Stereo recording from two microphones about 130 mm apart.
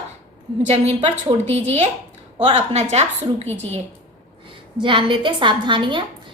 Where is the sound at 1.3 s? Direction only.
40° right (ahead or behind).